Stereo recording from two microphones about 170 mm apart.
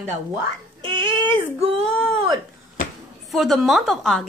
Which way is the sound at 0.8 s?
30° right (ahead or behind).